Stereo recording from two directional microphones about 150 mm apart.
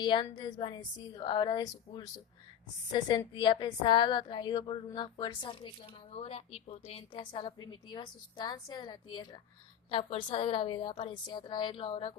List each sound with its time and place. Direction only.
0.0 s a woman's voice: 30° left (ahead or behind)